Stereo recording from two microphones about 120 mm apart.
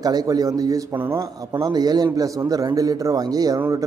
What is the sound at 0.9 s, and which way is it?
Speech, 20° right (ahead or behind).